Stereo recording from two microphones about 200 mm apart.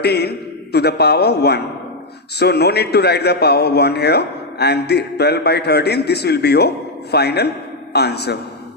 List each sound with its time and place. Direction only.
0.0 s a man's voice: 55° left (ahead or behind)